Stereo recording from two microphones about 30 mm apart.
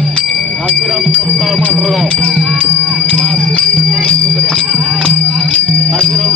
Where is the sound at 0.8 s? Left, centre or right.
Centre.